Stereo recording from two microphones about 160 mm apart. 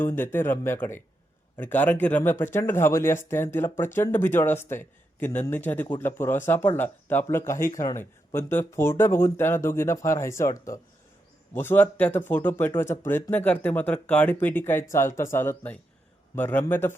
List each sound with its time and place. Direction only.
0.0 s speech: 15° left (ahead or behind)